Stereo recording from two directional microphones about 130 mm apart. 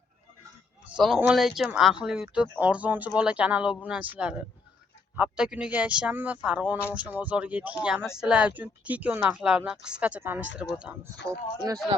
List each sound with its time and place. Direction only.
1.0 s speech: centre (ahead or behind)
11.3 s speech: 25° right (ahead or behind)